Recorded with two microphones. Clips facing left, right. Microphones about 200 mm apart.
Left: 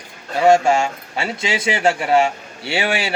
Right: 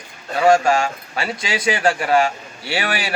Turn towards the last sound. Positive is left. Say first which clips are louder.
# left 2 dB
turn(degrees=25)  # may be behind; listen again after turning